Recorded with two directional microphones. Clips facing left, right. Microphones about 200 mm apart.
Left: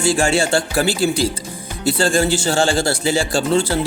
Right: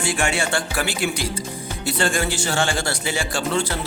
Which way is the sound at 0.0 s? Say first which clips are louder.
Left 6 dB; 30° left (ahead or behind).